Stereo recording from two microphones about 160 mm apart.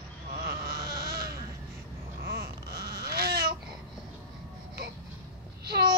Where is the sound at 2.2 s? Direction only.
75° right (ahead or behind).